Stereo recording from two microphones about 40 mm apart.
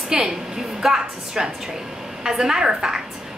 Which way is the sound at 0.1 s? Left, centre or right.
Centre.